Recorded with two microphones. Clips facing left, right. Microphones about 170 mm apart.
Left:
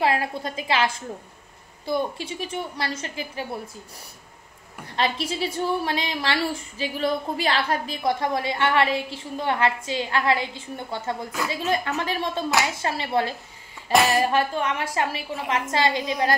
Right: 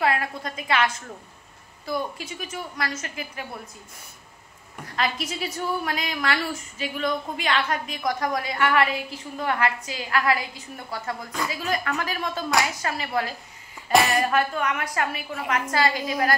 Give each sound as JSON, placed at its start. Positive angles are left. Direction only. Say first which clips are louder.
{"t": 0.0, "sound": "a woman's voice", "louder": "left 2 dB", "side_deg": 30}
{"t": 4.8, "sound": "a woman's voice", "louder": "left 2 dB", "side_deg": 30}
{"t": 13.9, "sound": "speech", "louder": "left 1 dB", "side_deg": 0}
{"t": 14.2, "sound": "a woman's voice", "louder": "left 1 dB", "side_deg": 30}